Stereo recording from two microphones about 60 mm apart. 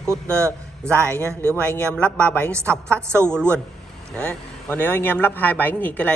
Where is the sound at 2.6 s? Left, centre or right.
Right.